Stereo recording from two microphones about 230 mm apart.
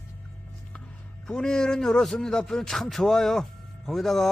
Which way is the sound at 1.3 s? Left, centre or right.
Centre.